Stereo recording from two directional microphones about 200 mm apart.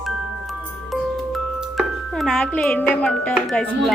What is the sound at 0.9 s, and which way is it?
Music, centre (ahead or behind).